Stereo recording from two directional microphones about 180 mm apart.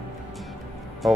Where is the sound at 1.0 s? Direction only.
Centre (ahead or behind).